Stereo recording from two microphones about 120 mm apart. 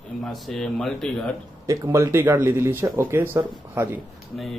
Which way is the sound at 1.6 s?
30° right (ahead or behind).